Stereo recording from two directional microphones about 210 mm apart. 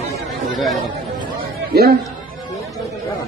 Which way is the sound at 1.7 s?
50° right (ahead or behind).